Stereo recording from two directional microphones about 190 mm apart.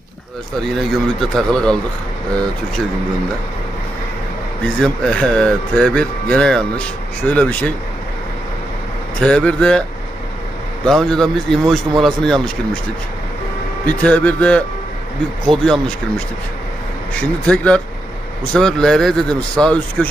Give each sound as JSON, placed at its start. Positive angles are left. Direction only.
{"t": 0.6, "sound": "speech", "side_deg": 0}
{"t": 4.8, "sound": "speech", "side_deg": 5}
{"t": 9.2, "sound": "speech", "side_deg": 5}
{"t": 10.9, "sound": "speech", "side_deg": 0}
{"t": 13.8, "sound": "speech", "side_deg": 5}
{"t": 17.2, "sound": "speech", "side_deg": 5}